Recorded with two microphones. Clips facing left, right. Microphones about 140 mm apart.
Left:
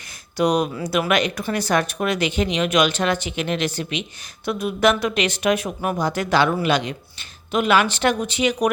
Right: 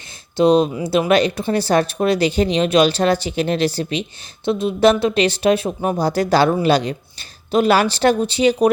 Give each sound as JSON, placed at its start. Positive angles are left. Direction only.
{"t": 0.3, "sound": "speech", "side_deg": -25}